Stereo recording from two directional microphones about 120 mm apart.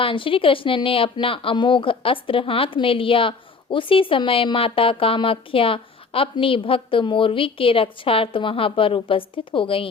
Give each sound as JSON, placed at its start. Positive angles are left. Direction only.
{"t": 0.0, "sound": "a woman's voice", "side_deg": 45}